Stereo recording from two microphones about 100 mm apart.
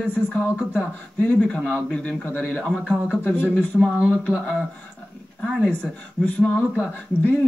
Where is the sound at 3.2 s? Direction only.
15° left (ahead or behind).